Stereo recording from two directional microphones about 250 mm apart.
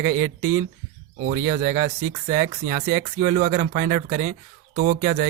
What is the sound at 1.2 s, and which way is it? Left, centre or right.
Speech, right.